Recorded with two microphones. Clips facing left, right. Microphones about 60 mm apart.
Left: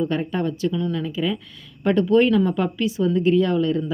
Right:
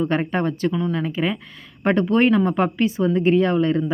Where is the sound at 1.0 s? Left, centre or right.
Right.